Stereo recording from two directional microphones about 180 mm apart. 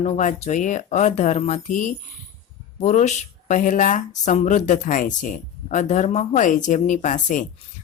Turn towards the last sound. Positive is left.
turn(degrees=45)  # may be behind; listen again after turning